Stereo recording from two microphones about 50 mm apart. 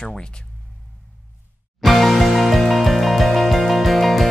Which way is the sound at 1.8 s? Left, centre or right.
Centre.